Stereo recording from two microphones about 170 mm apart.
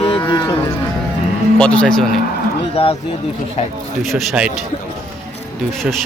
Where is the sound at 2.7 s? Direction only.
35° left (ahead or behind).